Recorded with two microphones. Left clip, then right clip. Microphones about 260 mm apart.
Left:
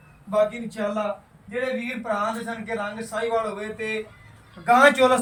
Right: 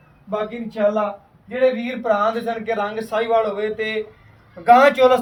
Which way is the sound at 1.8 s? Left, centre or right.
Right.